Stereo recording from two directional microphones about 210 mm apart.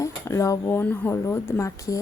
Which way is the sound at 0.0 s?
15° left (ahead or behind).